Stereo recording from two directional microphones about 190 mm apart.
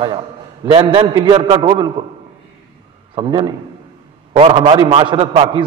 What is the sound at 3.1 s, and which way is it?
A man's voice, 25° right (ahead or behind).